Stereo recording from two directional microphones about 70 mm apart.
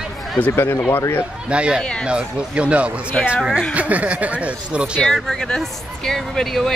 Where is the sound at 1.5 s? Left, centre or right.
Centre.